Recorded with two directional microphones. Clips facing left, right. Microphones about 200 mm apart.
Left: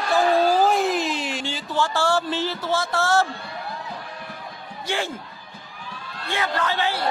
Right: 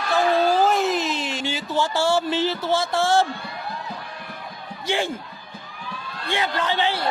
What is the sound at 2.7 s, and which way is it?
Speech, 25° right (ahead or behind).